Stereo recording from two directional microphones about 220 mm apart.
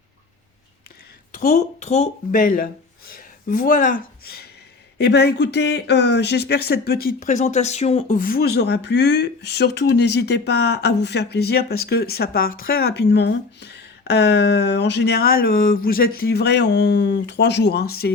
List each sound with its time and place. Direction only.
1.3 s speech: 35° left (ahead or behind)